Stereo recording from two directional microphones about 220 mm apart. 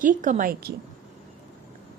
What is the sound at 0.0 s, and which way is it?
Speech, 35° right (ahead or behind).